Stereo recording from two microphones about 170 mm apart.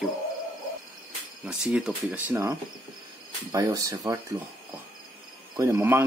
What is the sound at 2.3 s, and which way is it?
Speech, 15° right (ahead or behind).